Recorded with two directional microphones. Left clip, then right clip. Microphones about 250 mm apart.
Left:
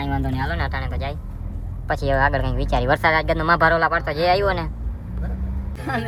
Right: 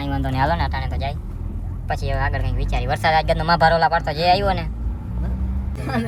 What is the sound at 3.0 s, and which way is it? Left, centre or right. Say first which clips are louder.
Speech: right 1 dB; centre.